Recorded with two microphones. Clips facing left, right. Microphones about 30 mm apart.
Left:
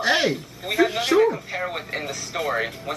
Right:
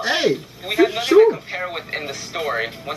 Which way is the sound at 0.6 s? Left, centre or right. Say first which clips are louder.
Right 3 dB; centre.